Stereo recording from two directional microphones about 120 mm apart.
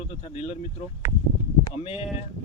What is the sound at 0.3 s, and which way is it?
Speech, 55° left (ahead or behind).